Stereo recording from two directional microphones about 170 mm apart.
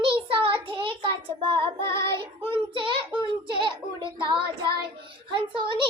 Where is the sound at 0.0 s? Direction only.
30° right (ahead or behind).